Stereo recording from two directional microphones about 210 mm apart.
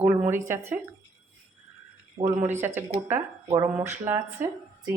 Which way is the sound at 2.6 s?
10° right (ahead or behind).